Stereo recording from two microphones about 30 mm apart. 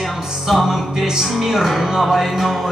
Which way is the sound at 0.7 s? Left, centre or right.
Centre.